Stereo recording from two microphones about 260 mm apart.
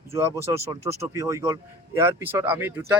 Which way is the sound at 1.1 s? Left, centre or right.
Centre.